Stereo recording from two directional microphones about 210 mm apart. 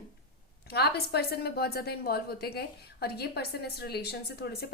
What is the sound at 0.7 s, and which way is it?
A woman's voice, 50° left (ahead or behind).